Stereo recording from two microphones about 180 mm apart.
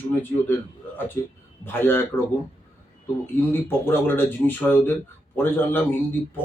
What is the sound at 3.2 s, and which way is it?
Speech, 10° left (ahead or behind).